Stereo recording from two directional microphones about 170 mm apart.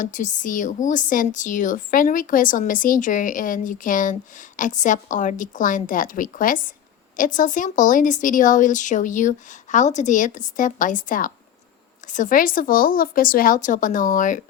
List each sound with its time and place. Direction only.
0.0 s speech: 50° left (ahead or behind)